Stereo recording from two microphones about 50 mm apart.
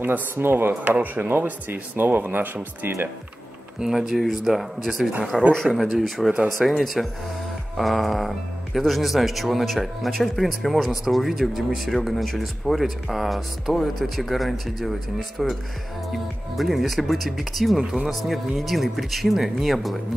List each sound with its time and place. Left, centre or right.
0.0 s speech: right
3.8 s speech: centre
16.5 s speech: centre